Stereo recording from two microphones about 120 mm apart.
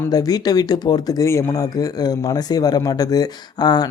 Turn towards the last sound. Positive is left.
turn(degrees=35)  # may be behind; listen again after turning